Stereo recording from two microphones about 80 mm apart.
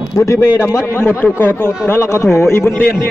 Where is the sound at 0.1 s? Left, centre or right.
Left.